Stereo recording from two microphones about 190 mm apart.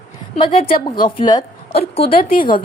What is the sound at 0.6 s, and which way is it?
A woman's voice, 50° left (ahead or behind).